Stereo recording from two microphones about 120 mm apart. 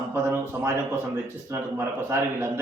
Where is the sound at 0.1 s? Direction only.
20° right (ahead or behind).